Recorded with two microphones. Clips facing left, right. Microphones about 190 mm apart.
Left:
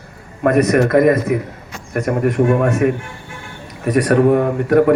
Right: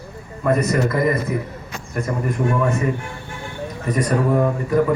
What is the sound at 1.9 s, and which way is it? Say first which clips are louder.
A man's voice: left 7 dB; 75° left (ahead or behind).